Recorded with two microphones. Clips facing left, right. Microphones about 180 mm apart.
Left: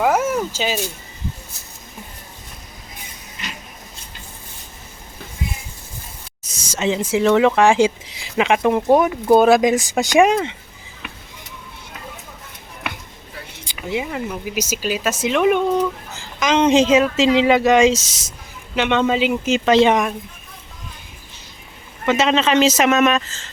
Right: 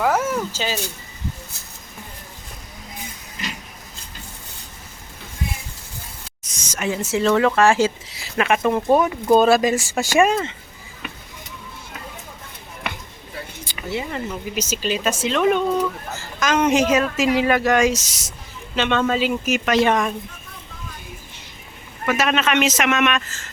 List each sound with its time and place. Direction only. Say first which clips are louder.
0.0 s cat: left 2 dB; 20° left (ahead or behind)
6.7 s speech: left 4 dB; 25° left (ahead or behind)
13.7 s speech: left 3 dB; 15° left (ahead or behind)
22.0 s speech: left 3 dB; 25° left (ahead or behind)